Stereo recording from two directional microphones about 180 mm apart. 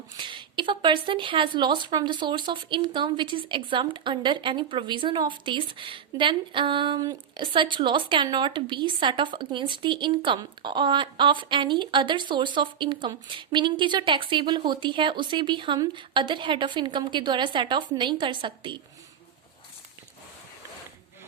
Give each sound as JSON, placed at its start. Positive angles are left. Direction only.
{"t": 0.2, "sound": "speech", "side_deg": -25}